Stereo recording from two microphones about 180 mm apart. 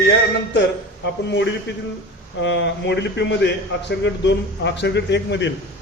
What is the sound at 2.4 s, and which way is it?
A man's voice, 80° left.